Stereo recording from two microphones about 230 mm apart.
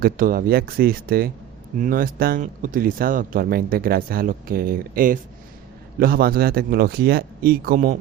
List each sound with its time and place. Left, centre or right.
0.0 s speech: right